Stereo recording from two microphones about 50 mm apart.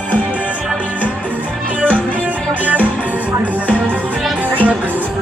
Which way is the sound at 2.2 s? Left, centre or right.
Right.